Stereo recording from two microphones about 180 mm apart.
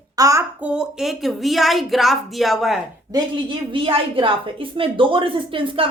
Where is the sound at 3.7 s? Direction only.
30° right (ahead or behind).